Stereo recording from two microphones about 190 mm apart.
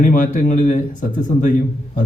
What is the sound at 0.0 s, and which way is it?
A man's voice, 45° left (ahead or behind).